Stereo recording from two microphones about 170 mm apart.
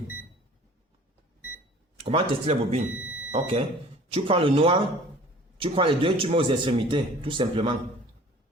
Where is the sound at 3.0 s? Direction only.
5° right (ahead or behind).